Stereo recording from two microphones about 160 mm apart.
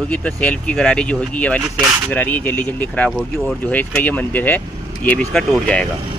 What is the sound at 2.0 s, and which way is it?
Speech, 10° left (ahead or behind).